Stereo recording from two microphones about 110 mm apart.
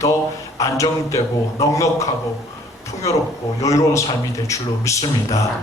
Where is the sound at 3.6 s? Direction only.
30° left (ahead or behind).